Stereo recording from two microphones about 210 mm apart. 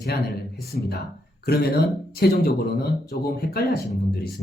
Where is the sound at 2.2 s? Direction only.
50° left (ahead or behind).